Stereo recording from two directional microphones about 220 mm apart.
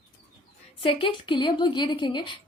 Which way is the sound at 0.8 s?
25° left (ahead or behind).